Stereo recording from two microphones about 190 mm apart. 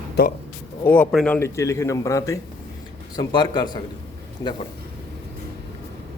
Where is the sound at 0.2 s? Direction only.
60° left (ahead or behind).